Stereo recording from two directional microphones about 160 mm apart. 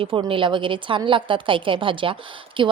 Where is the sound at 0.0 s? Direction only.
30° right (ahead or behind).